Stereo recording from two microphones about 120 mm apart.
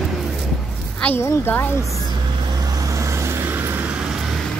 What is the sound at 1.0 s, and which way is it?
Speech, 20° left (ahead or behind).